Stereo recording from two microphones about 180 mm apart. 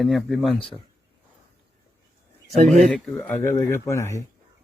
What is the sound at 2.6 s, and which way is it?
Speech, 40° right (ahead or behind).